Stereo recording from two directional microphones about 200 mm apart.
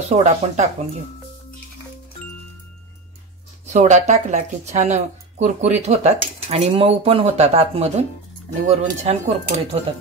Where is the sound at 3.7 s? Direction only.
35° right (ahead or behind).